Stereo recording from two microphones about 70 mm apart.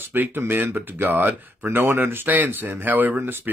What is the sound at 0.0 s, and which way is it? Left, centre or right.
Speech, right.